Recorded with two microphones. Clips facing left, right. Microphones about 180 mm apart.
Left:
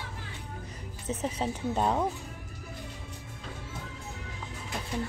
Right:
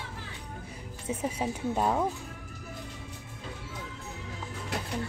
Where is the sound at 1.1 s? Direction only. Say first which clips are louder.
Even; 10° right (ahead or behind).